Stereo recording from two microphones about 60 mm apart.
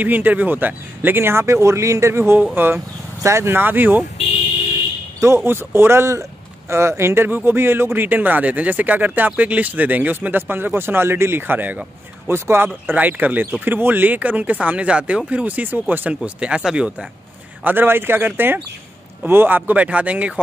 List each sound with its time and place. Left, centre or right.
0.0 s speech: right
5.2 s speech: right
12.3 s speech: right
12.9 s speech: right
16.1 s speech: centre
17.6 s speech: right